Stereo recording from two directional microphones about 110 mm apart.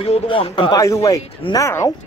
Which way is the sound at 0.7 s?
30° left (ahead or behind).